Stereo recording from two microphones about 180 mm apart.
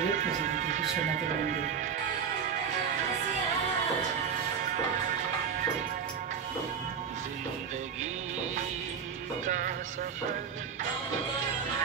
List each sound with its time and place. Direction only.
0.0 s speech: 40° right (ahead or behind)
9.5 s music: 45° right (ahead or behind)